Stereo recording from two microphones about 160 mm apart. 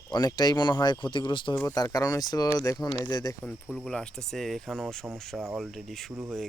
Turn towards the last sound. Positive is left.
turn(degrees=0)  # may be behind; listen again after turning